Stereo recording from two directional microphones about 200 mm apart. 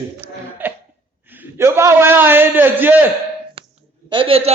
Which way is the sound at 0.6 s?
10° right (ahead or behind).